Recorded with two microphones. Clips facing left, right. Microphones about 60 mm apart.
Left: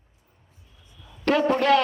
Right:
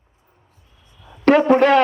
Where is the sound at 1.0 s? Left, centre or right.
Right.